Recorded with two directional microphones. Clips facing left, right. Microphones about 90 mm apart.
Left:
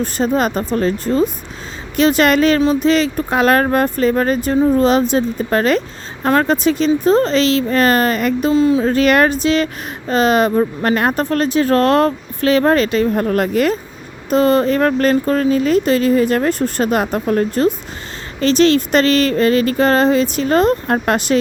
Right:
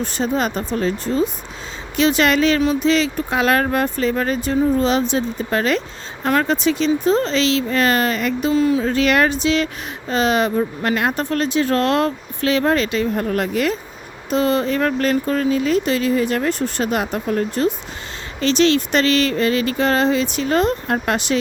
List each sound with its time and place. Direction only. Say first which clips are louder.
0.0 s speech: left 4 dB; 45° left (ahead or behind)
8.5 s speech: left 3 dB; 30° left (ahead or behind)